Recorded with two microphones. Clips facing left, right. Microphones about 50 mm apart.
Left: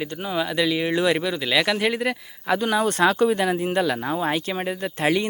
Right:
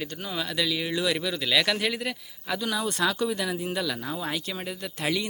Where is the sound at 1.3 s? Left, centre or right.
Left.